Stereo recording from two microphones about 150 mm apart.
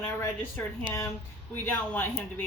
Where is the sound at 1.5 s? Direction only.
15° left (ahead or behind).